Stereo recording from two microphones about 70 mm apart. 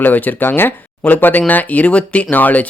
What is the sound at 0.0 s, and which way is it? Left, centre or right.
Speech, left.